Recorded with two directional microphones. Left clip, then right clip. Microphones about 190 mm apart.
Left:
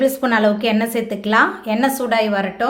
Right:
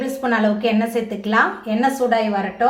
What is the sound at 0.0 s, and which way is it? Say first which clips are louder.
A woman's voice: left 4 dB; 40° left (ahead or behind).